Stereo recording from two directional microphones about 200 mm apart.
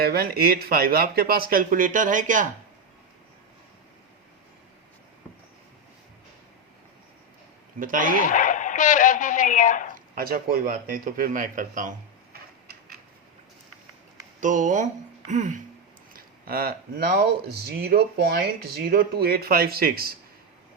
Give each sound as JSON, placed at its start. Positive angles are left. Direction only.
{"t": 0.0, "sound": "speech", "side_deg": -50}
{"t": 7.8, "sound": "speech", "side_deg": -45}
{"t": 8.2, "sound": "speech", "side_deg": 40}
{"t": 10.2, "sound": "speech", "side_deg": -45}
{"t": 14.4, "sound": "speech", "side_deg": -40}